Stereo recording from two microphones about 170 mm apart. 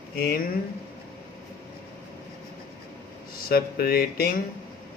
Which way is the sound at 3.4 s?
60° left (ahead or behind).